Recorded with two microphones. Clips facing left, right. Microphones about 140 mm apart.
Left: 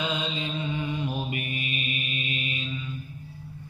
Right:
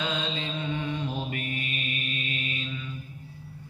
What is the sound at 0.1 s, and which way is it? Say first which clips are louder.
Mantra: left 1 dB; 10° left (ahead or behind).